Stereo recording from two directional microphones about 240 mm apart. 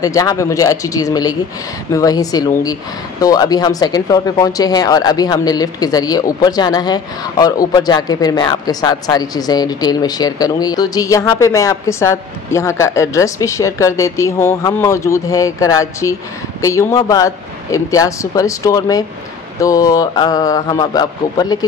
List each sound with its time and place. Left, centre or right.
0.0 s speech: centre